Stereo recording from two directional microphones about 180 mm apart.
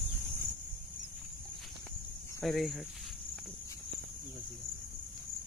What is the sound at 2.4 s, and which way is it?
Speech, centre (ahead or behind).